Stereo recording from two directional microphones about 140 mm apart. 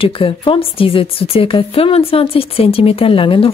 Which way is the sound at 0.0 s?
40° left (ahead or behind).